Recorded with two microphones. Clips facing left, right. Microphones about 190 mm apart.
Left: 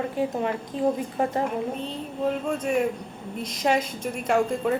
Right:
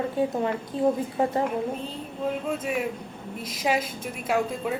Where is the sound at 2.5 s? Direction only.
5° right (ahead or behind).